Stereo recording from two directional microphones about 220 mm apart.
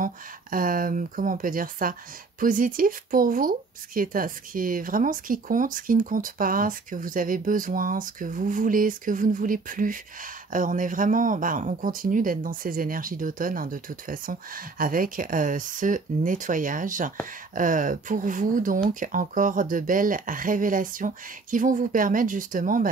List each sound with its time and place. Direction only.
0.0 s speech: 40° right (ahead or behind)